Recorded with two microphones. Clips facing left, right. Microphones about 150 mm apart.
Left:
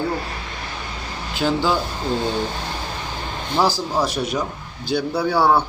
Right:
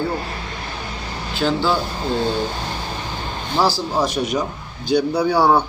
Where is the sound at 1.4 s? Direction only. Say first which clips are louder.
Right 1 dB; 10° left (ahead or behind).